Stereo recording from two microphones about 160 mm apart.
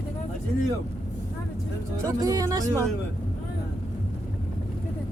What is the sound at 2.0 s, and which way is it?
Speech, 20° right (ahead or behind).